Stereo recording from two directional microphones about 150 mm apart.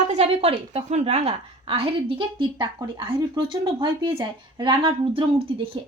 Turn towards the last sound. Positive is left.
turn(degrees=-35)  # may be behind; listen again after turning